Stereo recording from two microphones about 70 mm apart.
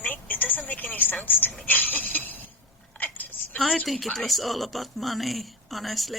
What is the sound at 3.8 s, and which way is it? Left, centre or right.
Speech, centre.